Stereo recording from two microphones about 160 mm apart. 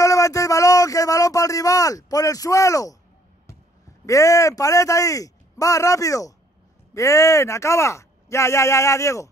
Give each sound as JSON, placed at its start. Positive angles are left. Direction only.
{"t": 0.0, "sound": "a man's voice", "side_deg": 20}
{"t": 4.0, "sound": "speech", "side_deg": 20}